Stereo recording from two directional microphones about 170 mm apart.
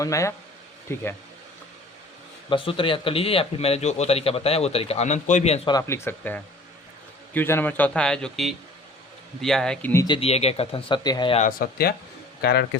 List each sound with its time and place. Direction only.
0.0 s speech: 20° left (ahead or behind)
2.5 s a man's voice: 30° left (ahead or behind)
5.6 s speech: 20° left (ahead or behind); by 9.9 s 5° left (ahead or behind)
9.9 s speech: 20° left (ahead or behind)
10.2 s a man's voice: 35° left (ahead or behind)
11.3 s speech: 55° left (ahead or behind)
12.4 s a man's voice: 70° left (ahead or behind)